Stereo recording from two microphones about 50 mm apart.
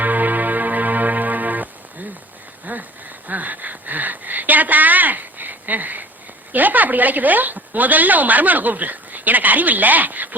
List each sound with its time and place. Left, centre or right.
0.0 s music: right
2.7 s a sound: right
6.5 s speech: right